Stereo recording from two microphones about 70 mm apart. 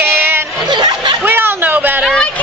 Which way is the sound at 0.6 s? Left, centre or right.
Right.